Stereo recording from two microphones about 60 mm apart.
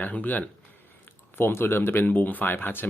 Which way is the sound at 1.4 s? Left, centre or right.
Left.